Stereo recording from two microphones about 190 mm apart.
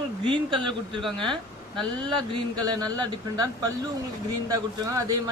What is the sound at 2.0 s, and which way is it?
Speech, 20° right (ahead or behind).